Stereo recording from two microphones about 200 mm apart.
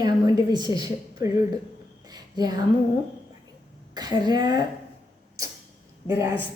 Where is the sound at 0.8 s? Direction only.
15° right (ahead or behind).